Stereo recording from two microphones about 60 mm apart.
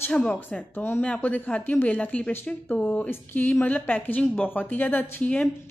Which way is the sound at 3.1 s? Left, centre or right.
Left.